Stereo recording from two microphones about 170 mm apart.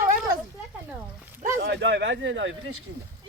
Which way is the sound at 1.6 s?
90° right.